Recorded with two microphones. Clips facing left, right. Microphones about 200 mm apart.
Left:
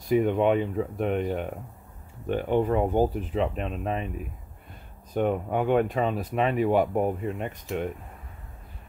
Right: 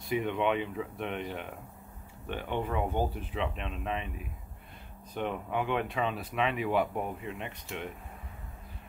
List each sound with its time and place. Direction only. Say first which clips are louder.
0.0 s speech: left 8 dB; 40° left (ahead or behind)
5.1 s speech: left 8 dB; 45° left (ahead or behind)